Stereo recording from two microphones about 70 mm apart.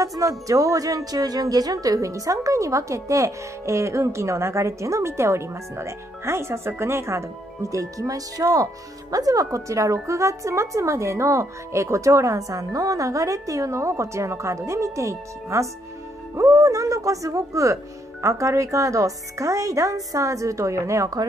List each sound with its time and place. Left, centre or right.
0.0 s a woman's voice: right